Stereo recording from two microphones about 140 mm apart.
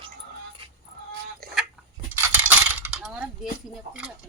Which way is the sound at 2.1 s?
15° right (ahead or behind).